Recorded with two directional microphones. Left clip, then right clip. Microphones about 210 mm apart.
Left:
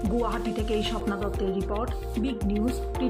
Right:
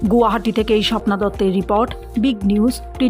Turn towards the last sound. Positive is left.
turn(degrees=-50)  # may be behind; listen again after turning